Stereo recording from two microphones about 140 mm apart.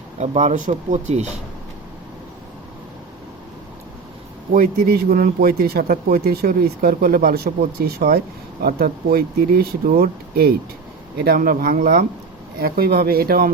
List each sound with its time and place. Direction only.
0.2 s speech: 55° right (ahead or behind)
4.5 s a man's voice: 90° right